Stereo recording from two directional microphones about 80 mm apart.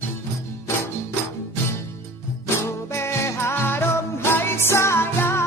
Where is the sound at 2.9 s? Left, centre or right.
Left.